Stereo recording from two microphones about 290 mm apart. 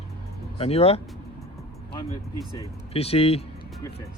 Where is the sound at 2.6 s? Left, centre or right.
Left.